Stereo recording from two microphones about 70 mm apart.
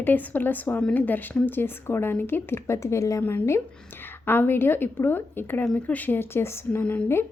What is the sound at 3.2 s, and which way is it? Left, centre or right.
A woman's voice, left.